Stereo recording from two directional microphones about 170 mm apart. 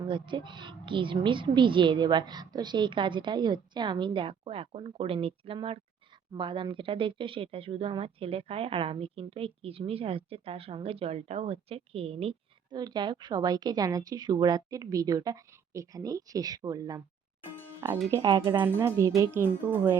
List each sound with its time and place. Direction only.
0.0 s speech: 30° right (ahead or behind)
12.7 s speech: 25° right (ahead or behind)
18.1 s speech: 25° right (ahead or behind)
18.5 s speech: 15° right (ahead or behind)